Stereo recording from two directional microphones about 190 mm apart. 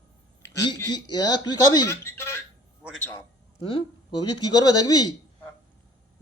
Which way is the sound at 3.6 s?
25° left (ahead or behind).